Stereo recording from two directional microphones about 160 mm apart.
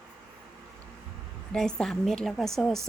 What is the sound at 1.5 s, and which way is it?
A woman's voice, 5° left (ahead or behind).